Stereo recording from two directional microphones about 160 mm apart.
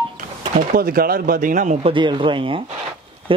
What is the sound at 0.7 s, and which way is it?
Speech, 65° right (ahead or behind).